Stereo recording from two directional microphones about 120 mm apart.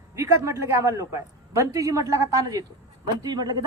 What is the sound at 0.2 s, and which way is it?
A man's voice, 25° right (ahead or behind).